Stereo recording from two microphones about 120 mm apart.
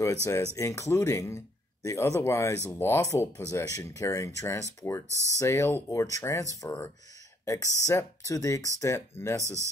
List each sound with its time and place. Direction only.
0.0 s speech: 25° left (ahead or behind)
5.1 s speech: 25° right (ahead or behind)
5.4 s speech: 25° left (ahead or behind)
9.4 s speech: 25° right (ahead or behind)